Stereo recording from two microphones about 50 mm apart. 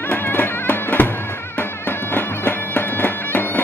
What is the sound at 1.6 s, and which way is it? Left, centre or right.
Bagpipes, left.